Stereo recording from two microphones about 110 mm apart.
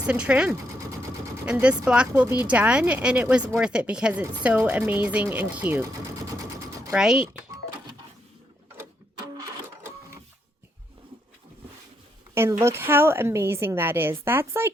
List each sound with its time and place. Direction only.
0.0 s speech: 10° right (ahead or behind)
1.9 s speech: 10° right (ahead or behind)
6.4 s sewing machine: 30° right (ahead or behind)
6.9 s speech: 5° right (ahead or behind)
12.3 s a woman's voice: 20° right (ahead or behind)